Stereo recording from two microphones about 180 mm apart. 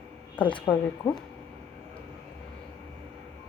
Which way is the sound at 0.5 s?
25° left (ahead or behind).